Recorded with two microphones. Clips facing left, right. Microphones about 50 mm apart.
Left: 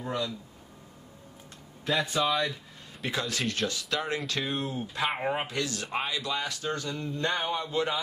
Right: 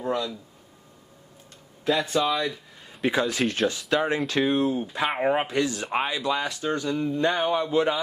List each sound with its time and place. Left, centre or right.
0.0 s speech: centre
1.9 s speech: centre
3.1 s speech: right
4.4 s speech: centre
4.9 s speech: centre